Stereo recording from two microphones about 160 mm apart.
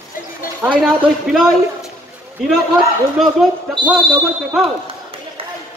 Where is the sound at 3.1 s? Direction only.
Centre (ahead or behind).